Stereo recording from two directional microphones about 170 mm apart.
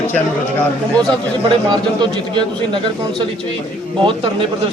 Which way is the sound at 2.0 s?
25° right (ahead or behind).